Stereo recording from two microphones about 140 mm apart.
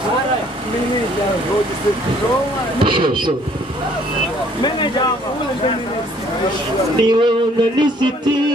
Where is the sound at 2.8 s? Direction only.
35° right (ahead or behind).